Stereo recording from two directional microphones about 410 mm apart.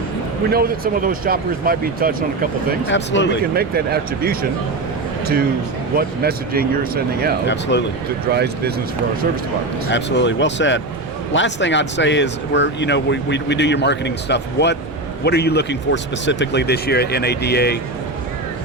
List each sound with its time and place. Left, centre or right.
0.5 s speech: right
2.8 s speech: left
3.4 s a man's voice: right
7.4 s speech: left
8.3 s speech: right
9.9 s speech: left